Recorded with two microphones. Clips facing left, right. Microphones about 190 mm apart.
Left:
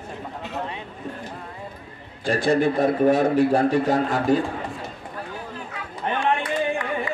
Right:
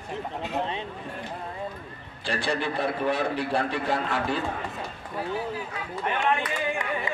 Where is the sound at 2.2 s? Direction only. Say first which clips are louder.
Left 9 dB; 45° left (ahead or behind).